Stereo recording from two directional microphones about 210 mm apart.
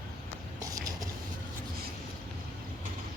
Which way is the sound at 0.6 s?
15° right (ahead or behind).